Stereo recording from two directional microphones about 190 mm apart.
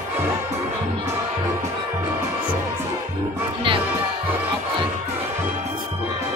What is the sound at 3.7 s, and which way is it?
Music, 30° right (ahead or behind).